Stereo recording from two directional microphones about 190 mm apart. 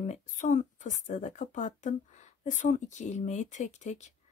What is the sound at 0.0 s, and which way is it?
Speech, 40° left (ahead or behind).